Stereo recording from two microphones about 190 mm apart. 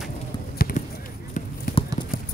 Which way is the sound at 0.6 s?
50° left (ahead or behind).